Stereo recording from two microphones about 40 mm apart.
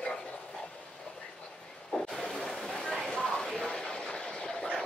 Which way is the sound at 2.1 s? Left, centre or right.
Centre.